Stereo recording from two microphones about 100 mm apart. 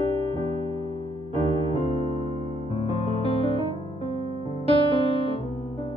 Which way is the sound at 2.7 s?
65° left (ahead or behind).